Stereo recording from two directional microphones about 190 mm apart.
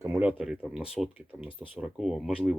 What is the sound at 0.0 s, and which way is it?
Speech, 10° right (ahead or behind).